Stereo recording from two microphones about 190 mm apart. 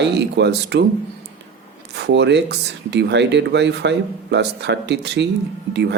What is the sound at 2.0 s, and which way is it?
Speech, 65° right (ahead or behind).